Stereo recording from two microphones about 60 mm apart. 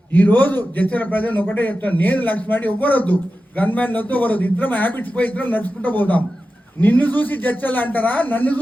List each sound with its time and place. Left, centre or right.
0.1 s a man's voice: left